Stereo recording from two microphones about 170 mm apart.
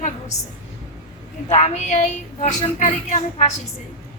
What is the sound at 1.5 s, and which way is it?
A woman's voice, 40° left (ahead or behind).